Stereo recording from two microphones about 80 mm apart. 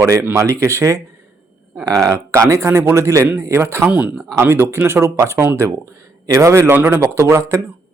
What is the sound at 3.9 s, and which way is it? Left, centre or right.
Speech, centre.